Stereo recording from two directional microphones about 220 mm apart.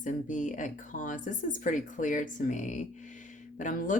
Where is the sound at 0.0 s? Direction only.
35° left (ahead or behind).